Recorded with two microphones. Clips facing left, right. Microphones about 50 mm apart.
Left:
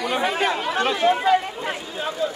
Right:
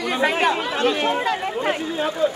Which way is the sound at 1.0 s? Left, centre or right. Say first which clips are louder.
Left 3 dB; centre.